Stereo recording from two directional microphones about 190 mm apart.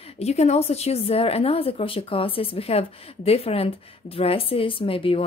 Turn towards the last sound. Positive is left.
turn(degrees=30)  # may be behind; listen again after turning